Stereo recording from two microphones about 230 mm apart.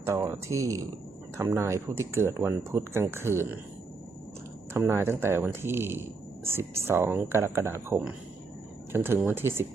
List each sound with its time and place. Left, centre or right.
0.0 s speech: centre
4.7 s speech: centre